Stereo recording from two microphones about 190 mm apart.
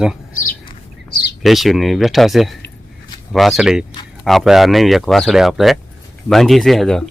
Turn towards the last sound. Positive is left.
turn(degrees=0)  # may be behind; listen again after turning